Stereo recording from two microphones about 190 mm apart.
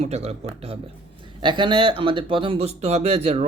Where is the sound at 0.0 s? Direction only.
35° right (ahead or behind).